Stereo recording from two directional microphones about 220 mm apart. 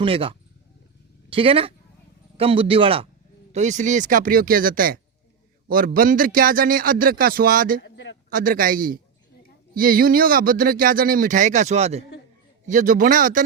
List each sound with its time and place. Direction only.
0.0 s speech: 25° right (ahead or behind); by 7.8 s 40° right (ahead or behind)
7.8 s a sound: 50° left (ahead or behind)
8.3 s speech: 40° right (ahead or behind)